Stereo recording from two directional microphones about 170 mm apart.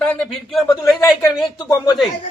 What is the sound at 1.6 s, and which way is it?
Speech, 20° left (ahead or behind).